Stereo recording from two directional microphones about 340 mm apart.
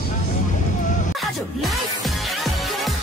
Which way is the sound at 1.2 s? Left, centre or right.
Centre.